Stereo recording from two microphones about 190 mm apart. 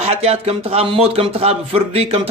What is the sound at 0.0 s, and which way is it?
A man's voice, 35° right (ahead or behind).